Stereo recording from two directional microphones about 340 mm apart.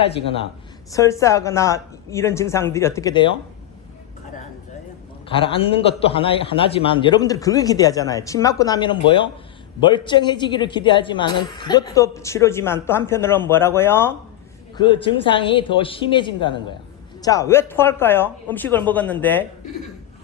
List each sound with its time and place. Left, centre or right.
0.0 s a man's voice: centre
5.3 s a man's voice: centre